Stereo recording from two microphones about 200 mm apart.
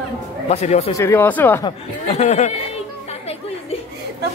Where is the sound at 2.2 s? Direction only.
35° left (ahead or behind).